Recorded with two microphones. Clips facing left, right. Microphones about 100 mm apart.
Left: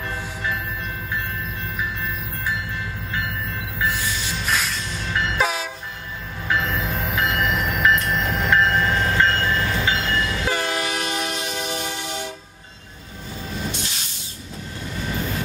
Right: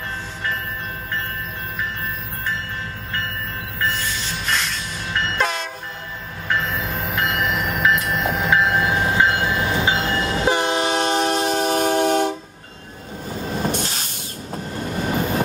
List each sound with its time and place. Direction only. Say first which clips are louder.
3.8 s music: even; 10° left (ahead or behind)
4.6 s train: even; centre (ahead or behind); by 12.4 s 55° right (ahead or behind)
13.5 s train: right 6 dB; 50° right (ahead or behind)